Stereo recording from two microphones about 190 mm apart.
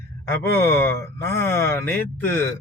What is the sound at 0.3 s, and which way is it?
Speech, 10° left (ahead or behind).